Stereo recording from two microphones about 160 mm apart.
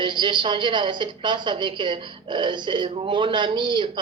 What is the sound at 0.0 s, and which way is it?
A woman's voice, 30° right (ahead or behind).